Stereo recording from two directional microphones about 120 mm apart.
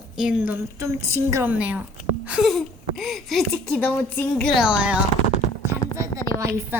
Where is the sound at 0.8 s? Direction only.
20° right (ahead or behind); by 4.5 s 15° left (ahead or behind).